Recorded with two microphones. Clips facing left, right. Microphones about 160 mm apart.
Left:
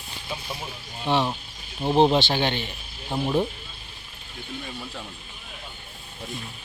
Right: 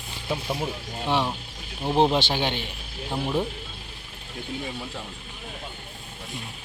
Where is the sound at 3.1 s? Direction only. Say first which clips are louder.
Left 2 dB; 10° left (ahead or behind).